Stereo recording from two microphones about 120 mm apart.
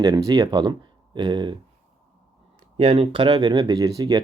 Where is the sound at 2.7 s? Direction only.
55° right (ahead or behind); by 4.2 s 30° right (ahead or behind).